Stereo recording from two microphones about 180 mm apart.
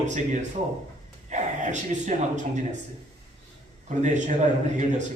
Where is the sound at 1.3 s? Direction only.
45° right (ahead or behind).